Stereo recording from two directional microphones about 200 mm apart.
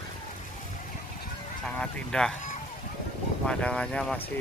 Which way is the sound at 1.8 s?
5° left (ahead or behind).